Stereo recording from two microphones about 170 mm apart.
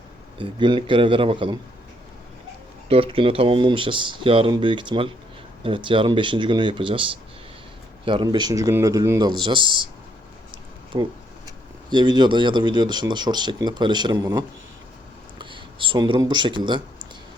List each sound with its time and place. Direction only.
0.3 s speech: 30° right (ahead or behind)
2.9 s speech: 30° right (ahead or behind)
10.9 s speech: 25° right (ahead or behind)